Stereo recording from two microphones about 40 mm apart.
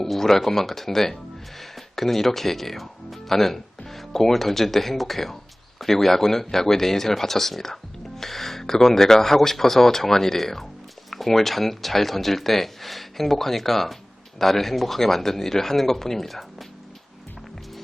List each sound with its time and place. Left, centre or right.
0.0 s speech: centre